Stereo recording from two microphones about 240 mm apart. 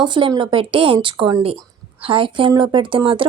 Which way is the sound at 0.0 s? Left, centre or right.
Centre.